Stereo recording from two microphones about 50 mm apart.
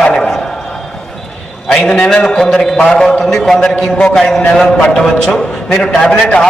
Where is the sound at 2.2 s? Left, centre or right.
Centre.